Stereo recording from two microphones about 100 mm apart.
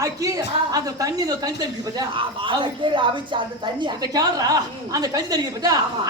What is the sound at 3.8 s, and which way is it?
A woman's voice, 40° right (ahead or behind).